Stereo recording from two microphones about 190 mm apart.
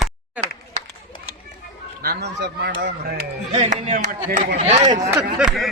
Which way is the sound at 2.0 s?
60° right (ahead or behind).